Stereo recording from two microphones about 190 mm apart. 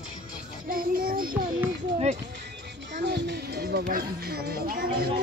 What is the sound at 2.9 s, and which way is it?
Speech, 60° right (ahead or behind).